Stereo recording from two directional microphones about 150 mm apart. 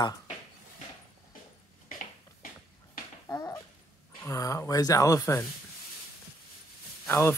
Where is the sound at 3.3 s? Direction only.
15° left (ahead or behind).